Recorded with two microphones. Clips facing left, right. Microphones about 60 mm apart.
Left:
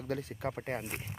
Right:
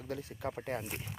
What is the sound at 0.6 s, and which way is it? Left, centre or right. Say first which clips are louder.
Speech: left 1 dB; left.